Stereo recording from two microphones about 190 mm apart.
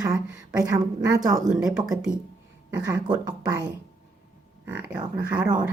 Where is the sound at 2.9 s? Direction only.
20° right (ahead or behind).